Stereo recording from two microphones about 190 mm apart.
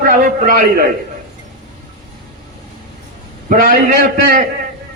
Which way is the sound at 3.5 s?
45° right (ahead or behind).